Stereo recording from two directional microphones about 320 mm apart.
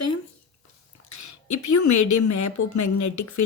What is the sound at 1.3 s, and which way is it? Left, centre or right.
Speech, left.